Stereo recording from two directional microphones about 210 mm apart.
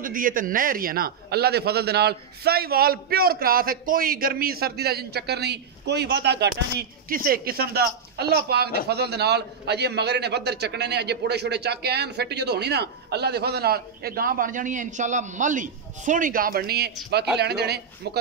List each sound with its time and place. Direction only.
0.0 s a man's voice: 40° right (ahead or behind)